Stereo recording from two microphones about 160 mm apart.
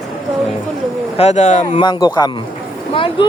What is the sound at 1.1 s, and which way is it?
Speech, 45° left (ahead or behind).